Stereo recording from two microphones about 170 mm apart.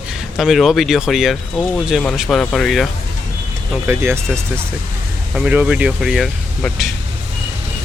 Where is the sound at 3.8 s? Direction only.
15° right (ahead or behind).